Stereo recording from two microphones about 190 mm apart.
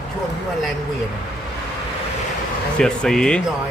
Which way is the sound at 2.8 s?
5° left (ahead or behind).